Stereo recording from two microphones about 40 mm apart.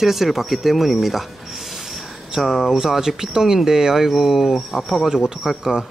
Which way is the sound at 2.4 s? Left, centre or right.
Centre.